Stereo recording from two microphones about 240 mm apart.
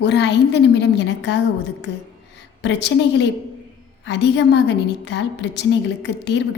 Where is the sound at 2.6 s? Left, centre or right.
Left.